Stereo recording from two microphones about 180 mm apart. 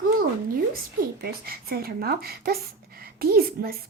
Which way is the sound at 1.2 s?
60° right (ahead or behind).